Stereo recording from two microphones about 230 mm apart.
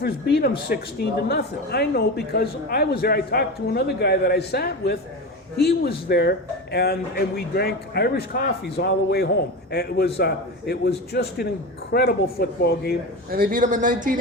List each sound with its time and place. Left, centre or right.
0.0 s speech: left
13.3 s speech: right